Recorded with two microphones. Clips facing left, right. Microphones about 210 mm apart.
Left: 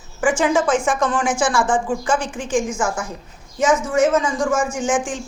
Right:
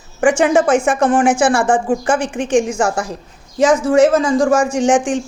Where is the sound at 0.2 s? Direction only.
70° right (ahead or behind).